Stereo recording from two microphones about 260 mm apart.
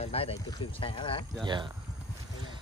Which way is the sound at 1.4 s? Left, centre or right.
Centre.